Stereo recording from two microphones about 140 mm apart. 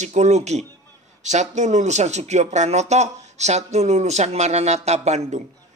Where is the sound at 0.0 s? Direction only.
55° right (ahead or behind).